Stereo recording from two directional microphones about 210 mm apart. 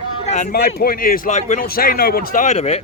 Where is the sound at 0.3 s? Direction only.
35° left (ahead or behind).